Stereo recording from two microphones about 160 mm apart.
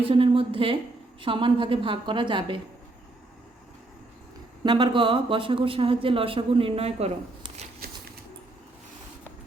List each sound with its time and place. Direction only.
0.0 s speech: 35° right (ahead or behind)
4.6 s speech: 30° right (ahead or behind)